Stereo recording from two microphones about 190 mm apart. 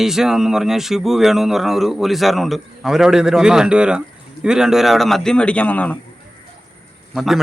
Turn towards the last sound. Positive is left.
turn(degrees=0)  # may be behind; listen again after turning